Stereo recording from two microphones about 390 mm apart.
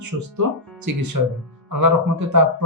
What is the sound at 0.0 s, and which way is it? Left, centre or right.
Speech, right.